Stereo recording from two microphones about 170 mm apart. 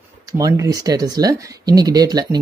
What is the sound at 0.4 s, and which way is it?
Speech, 20° right (ahead or behind).